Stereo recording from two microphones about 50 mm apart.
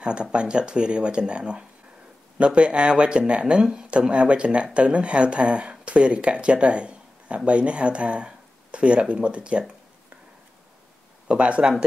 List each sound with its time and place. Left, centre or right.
0.0 s speech: right
11.2 s speech: right